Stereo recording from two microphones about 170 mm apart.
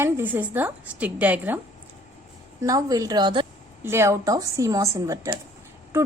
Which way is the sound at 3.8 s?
15° right (ahead or behind).